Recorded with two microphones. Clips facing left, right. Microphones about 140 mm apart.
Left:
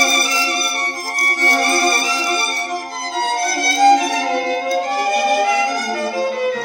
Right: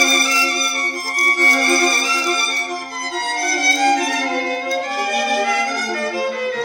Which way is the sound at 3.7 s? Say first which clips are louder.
Left 6 dB; 25° left (ahead or behind).